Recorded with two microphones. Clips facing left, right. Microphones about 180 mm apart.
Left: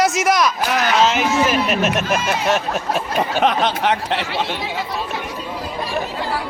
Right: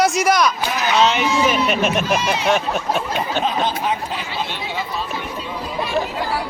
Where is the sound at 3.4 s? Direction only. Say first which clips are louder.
Left 4 dB; 80° left.